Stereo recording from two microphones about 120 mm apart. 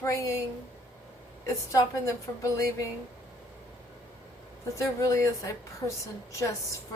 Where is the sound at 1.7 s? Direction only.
25° left (ahead or behind).